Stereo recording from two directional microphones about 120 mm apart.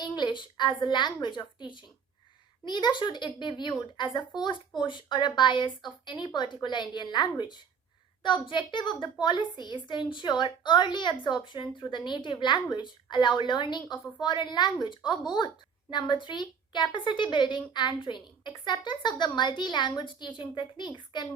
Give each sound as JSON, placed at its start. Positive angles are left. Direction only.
{"t": 0.0, "sound": "a woman's voice", "side_deg": 40}